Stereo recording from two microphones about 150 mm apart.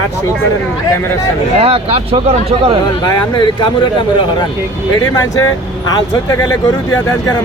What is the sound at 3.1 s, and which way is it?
Speech, 30° left (ahead or behind).